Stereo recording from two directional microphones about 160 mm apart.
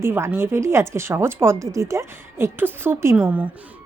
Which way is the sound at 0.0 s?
15° right (ahead or behind).